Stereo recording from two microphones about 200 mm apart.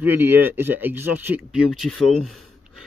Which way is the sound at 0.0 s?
10° right (ahead or behind).